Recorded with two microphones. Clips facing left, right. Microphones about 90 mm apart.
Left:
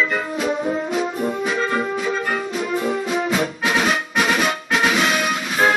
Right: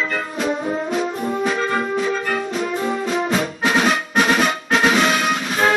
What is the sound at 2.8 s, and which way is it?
Music, 5° left (ahead or behind).